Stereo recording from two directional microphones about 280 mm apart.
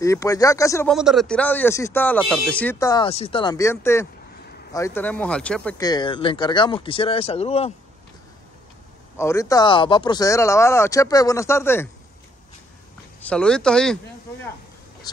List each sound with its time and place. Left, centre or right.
0.0 s speech: centre
0.9 s speech: centre; by 7.7 s left
9.1 s speech: centre
13.2 s speech: centre